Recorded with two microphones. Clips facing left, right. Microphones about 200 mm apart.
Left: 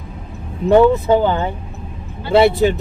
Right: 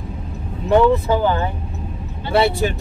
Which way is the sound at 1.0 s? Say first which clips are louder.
Left 3 dB; 20° left (ahead or behind).